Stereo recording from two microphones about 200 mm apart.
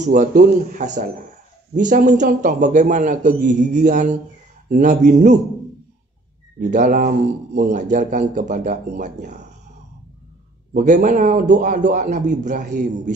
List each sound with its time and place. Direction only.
0.0 s a man's voice: 40° right (ahead or behind)
6.6 s a man's voice: 40° right (ahead or behind)
10.7 s a man's voice: 40° right (ahead or behind)